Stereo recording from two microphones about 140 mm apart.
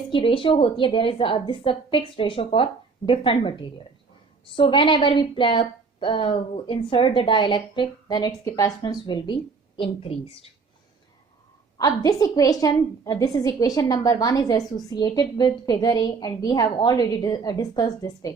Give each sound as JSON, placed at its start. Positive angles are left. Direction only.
{"t": 0.1, "sound": "a woman's voice", "side_deg": 35}
{"t": 11.8, "sound": "a woman's voice", "side_deg": 25}